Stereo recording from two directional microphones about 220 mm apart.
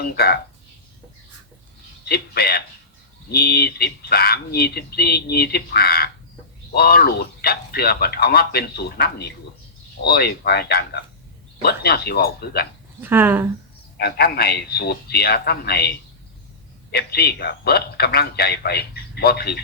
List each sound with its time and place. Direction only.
0.0 s speech: 45° left (ahead or behind)
2.0 s speech: 45° left (ahead or behind)
13.0 s speech: 10° right (ahead or behind)
14.0 s speech: 45° left (ahead or behind)
16.9 s speech: 45° left (ahead or behind)